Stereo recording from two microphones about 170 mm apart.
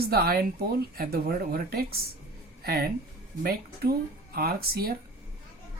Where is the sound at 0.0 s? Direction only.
65° right (ahead or behind).